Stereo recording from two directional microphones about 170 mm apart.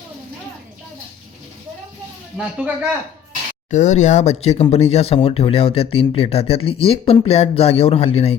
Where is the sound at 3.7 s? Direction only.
45° left (ahead or behind).